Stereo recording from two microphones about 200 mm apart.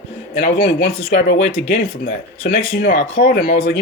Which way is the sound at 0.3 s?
50° left (ahead or behind).